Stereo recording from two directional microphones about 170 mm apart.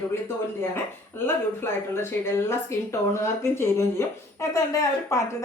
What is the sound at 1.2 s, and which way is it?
Speech, 15° left (ahead or behind).